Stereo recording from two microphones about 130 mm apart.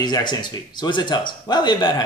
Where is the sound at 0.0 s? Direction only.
35° left (ahead or behind).